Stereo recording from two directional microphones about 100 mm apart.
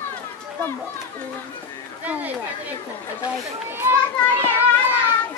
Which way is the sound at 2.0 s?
15° right (ahead or behind).